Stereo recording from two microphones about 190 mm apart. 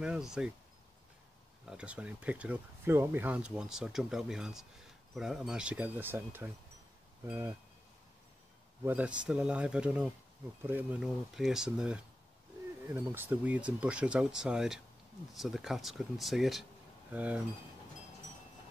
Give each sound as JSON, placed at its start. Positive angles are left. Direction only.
{"t": 0.0, "sound": "speech", "side_deg": -5}
{"t": 1.7, "sound": "speech", "side_deg": -5}
{"t": 8.8, "sound": "speech", "side_deg": -5}